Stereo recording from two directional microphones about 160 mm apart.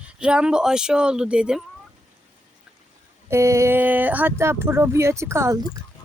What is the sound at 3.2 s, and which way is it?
Speech, 15° right (ahead or behind).